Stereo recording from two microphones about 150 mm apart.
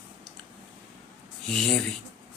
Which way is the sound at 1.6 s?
5° left (ahead or behind).